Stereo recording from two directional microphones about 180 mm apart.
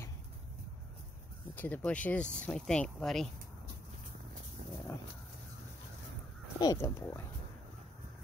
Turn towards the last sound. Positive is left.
turn(degrees=15)  # may be behind; listen again after turning